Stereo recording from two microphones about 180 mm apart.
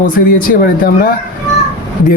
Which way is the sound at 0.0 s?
50° left (ahead or behind).